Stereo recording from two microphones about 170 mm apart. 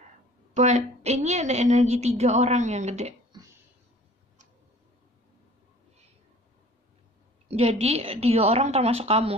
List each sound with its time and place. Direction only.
0.6 s a woman's voice: 40° right (ahead or behind)
7.4 s a woman's voice: 35° right (ahead or behind)